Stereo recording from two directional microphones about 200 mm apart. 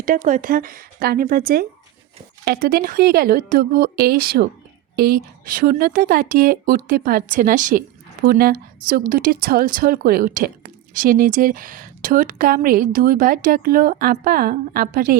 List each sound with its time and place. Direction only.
0.0 s speech: 40° right (ahead or behind)